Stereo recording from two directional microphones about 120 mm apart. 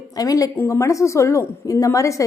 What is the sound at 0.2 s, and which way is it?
A woman's voice, 30° left (ahead or behind).